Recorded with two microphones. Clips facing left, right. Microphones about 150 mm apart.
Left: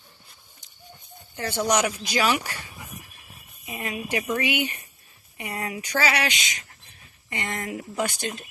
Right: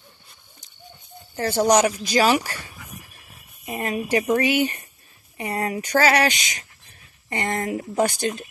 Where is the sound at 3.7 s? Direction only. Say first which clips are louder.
Right 6 dB; 40° right (ahead or behind).